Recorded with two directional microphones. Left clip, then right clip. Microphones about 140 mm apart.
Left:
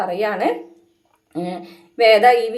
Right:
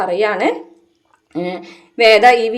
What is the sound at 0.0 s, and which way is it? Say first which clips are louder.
Speech: right 4 dB; 30° right (ahead or behind).